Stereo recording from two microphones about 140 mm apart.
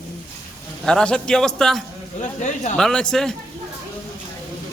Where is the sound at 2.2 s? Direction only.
60° left (ahead or behind).